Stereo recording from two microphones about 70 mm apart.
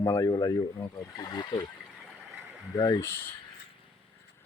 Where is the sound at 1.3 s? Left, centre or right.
Left.